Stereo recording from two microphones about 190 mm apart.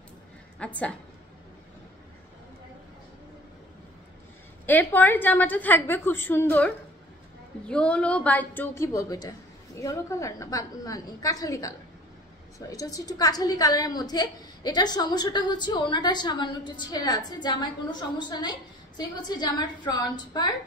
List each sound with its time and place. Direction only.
0.6 s a woman's voice: 5° left (ahead or behind)
4.6 s a woman's voice: 10° left (ahead or behind)